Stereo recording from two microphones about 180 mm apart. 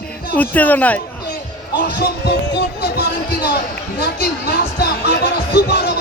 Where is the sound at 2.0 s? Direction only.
65° left (ahead or behind).